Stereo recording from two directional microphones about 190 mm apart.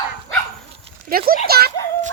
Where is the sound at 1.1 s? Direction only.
50° right (ahead or behind).